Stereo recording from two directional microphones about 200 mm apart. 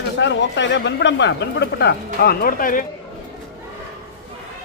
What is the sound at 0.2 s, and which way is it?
Speech, 65° left (ahead or behind).